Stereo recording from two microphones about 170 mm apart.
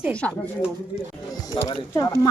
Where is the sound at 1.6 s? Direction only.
20° left (ahead or behind).